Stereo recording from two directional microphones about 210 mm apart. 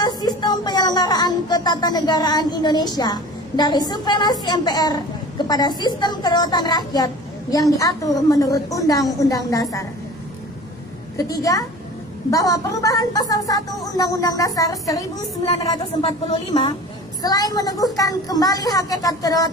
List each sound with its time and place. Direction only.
0.0 s a woman's voice: 20° left (ahead or behind)
11.3 s a woman's voice: 15° left (ahead or behind)
17.2 s a woman's voice: 15° left (ahead or behind)